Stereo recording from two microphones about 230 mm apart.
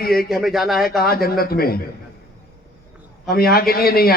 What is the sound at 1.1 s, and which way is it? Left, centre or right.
Speech, left.